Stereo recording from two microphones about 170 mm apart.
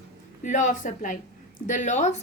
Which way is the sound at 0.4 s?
50° left (ahead or behind).